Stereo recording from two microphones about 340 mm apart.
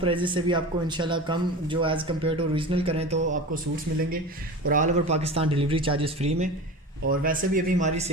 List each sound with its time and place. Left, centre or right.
0.0 s a man's voice: centre
4.6 s a man's voice: right